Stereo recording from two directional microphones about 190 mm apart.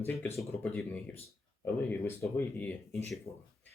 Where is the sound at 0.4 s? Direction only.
5° left (ahead or behind).